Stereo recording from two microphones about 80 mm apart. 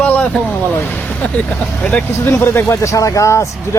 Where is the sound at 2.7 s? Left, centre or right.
Left.